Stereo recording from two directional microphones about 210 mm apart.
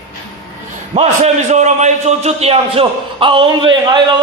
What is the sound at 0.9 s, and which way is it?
A man's voice, 30° right (ahead or behind).